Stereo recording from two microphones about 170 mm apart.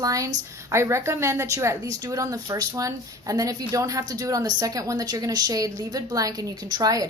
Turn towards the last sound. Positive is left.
turn(degrees=-20)  # may be behind; listen again after turning